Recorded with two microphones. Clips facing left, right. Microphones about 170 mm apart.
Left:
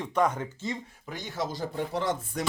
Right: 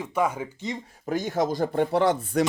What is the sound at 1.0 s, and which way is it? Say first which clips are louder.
Speech: right 9 dB; 45° right (ahead or behind).